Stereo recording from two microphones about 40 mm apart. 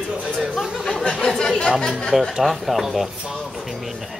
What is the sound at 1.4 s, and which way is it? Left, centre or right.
Speech, centre.